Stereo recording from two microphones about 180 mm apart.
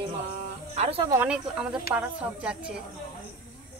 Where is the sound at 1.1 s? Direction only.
5° right (ahead or behind).